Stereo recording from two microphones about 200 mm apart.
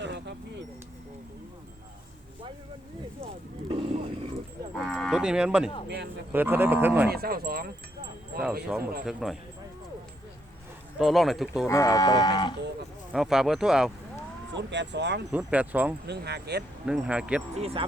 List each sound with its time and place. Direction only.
0.0 s a sound: 60° right (ahead or behind)
3.7 s a sound: 30° right (ahead or behind)
4.8 s cattle: centre (ahead or behind)
6.3 s speech: 10° right (ahead or behind)
7.1 s speech: 50° right (ahead or behind)
8.7 s speech: 5° right (ahead or behind)
10.9 s speech: centre (ahead or behind)
11.7 s livestock: 15° left (ahead or behind)
13.1 s speech: centre (ahead or behind)
14.5 s speech: 60° right (ahead or behind)
15.3 s speech: 5° right (ahead or behind)
16.0 s speech: 55° right (ahead or behind)
16.8 s speech: 5° right (ahead or behind)
17.6 s speech: 30° right (ahead or behind)